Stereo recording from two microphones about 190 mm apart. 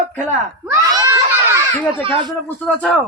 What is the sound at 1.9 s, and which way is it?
Speech, 30° right (ahead or behind).